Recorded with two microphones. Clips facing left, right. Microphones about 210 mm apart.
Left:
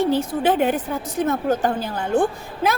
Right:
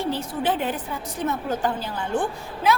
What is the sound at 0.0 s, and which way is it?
A woman's voice, 50° left (ahead or behind).